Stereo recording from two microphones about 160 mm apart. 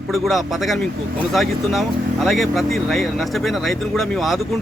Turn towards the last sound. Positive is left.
turn(degrees=0)  # may be behind; listen again after turning